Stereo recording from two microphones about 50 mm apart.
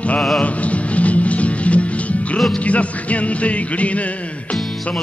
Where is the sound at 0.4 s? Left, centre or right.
Left.